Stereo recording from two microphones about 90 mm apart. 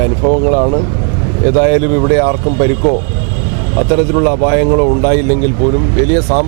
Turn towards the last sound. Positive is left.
turn(degrees=-15)  # may be behind; listen again after turning